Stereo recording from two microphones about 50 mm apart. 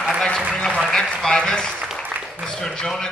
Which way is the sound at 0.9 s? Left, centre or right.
Centre.